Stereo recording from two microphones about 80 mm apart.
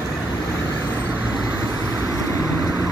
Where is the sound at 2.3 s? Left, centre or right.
Left.